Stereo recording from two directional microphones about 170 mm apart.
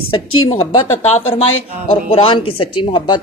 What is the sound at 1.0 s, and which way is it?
A woman's voice, 40° left (ahead or behind).